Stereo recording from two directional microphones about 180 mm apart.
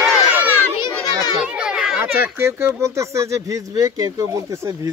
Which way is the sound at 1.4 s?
5° right (ahead or behind).